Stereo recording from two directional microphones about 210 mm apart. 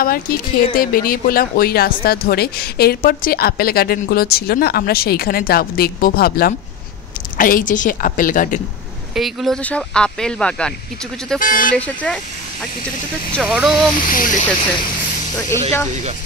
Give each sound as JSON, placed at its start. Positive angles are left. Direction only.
{"t": 0.0, "sound": "a woman's voice", "side_deg": 45}
{"t": 9.1, "sound": "speech", "side_deg": 0}
{"t": 11.3, "sound": "a woman's voice", "side_deg": 40}
{"t": 11.7, "sound": "speech", "side_deg": 5}
{"t": 13.3, "sound": "speech", "side_deg": 0}
{"t": 14.0, "sound": "a woman's voice", "side_deg": 40}